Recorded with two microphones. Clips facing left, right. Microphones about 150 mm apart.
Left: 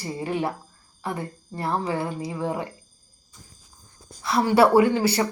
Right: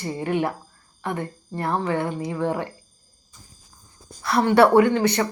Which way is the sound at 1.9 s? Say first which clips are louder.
Right 3 dB; 5° left (ahead or behind).